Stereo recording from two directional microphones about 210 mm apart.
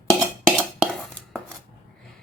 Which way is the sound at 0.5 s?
Centre (ahead or behind).